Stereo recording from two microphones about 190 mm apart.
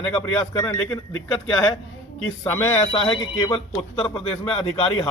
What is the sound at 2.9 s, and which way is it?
A man's voice, 30° left (ahead or behind).